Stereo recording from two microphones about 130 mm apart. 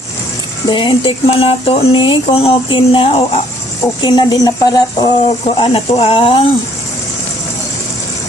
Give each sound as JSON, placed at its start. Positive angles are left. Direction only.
{"t": 0.7, "sound": "speech", "side_deg": 40}
{"t": 5.2, "sound": "speech", "side_deg": 45}